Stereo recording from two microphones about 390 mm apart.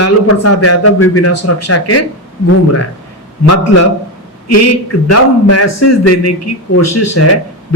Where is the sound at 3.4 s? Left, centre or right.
Left.